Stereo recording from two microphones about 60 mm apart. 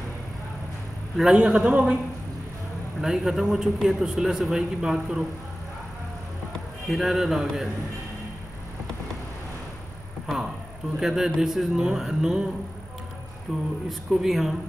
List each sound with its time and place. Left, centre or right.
1.1 s a man's voice: centre
3.0 s a man's voice: centre
6.9 s a man's voice: centre
10.2 s a man's voice: centre
13.5 s a man's voice: centre